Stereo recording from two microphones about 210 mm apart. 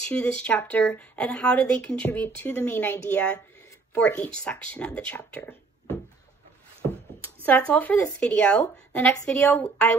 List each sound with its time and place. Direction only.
0.1 s speech: 5° left (ahead or behind)
7.4 s speech: 5° left (ahead or behind)